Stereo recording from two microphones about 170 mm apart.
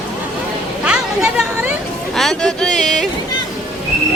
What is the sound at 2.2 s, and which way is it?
Speech, centre (ahead or behind).